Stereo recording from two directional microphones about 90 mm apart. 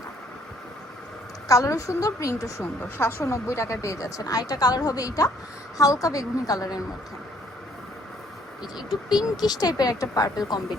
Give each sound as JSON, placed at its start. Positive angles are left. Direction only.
{"t": 1.5, "sound": "speech", "side_deg": 35}
{"t": 3.0, "sound": "speech", "side_deg": 25}
{"t": 8.9, "sound": "speech", "side_deg": -5}
{"t": 9.4, "sound": "speech", "side_deg": 50}